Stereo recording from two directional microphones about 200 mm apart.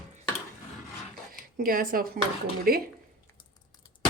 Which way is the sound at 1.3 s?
45° right (ahead or behind).